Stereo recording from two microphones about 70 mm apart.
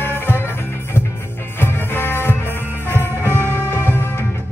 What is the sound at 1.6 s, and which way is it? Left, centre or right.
Music, left.